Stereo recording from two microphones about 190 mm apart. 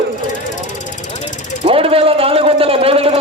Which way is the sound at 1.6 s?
30° right (ahead or behind).